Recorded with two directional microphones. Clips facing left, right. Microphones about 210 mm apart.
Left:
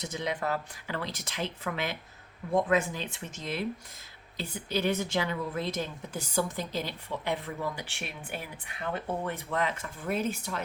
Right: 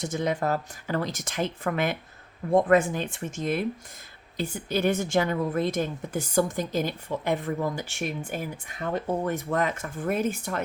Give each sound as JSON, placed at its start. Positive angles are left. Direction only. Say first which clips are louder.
{"t": 0.0, "sound": "a woman's voice", "louder": "right 6 dB", "side_deg": -50}